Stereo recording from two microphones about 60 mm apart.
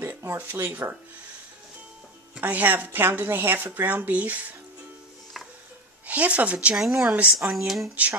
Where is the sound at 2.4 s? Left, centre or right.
Right.